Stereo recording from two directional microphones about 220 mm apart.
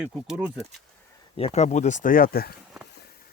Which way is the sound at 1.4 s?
30° left (ahead or behind).